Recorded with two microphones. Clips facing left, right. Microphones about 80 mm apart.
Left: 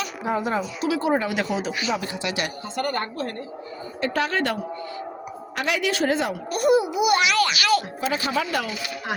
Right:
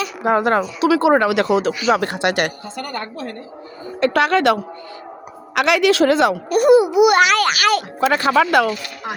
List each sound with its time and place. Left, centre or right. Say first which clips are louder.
0.2 s a child's voice: right 9 dB; right
2.7 s a woman's voice: left 1 dB; left
4.0 s a child's voice: right 9 dB; right